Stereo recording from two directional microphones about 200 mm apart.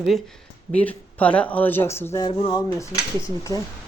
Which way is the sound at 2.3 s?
25° left (ahead or behind).